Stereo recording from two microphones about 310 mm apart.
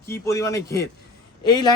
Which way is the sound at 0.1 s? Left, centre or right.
Centre.